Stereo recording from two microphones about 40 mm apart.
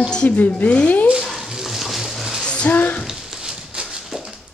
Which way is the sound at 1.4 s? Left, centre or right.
Centre.